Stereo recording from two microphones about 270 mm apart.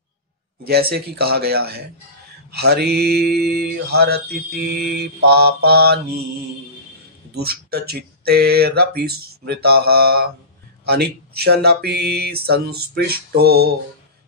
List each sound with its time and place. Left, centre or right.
0.7 s mantra: right
7.3 s speech: right
7.9 s mantra: right